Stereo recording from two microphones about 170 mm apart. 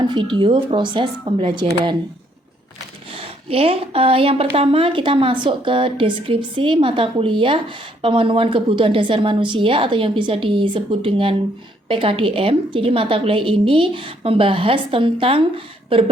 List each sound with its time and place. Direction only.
0.0 s speech: 30° right (ahead or behind)
3.2 s a woman's voice: 35° right (ahead or behind)